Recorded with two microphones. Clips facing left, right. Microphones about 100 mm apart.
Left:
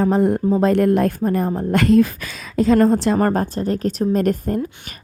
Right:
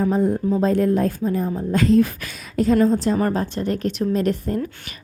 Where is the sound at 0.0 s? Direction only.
70° left (ahead or behind).